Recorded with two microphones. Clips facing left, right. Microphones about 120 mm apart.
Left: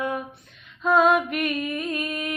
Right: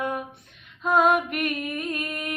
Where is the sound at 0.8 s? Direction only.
50° right (ahead or behind).